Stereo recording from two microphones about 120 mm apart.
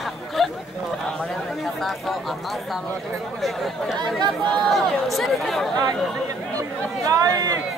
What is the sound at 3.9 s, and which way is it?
Speech, 40° right (ahead or behind).